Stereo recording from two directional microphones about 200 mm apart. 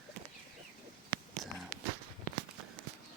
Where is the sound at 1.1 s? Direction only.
25° right (ahead or behind).